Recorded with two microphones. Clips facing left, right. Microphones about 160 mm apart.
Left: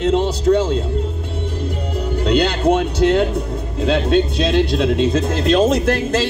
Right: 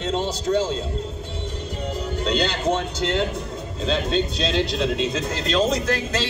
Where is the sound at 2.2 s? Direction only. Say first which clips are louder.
Left 7 dB; 60° left (ahead or behind).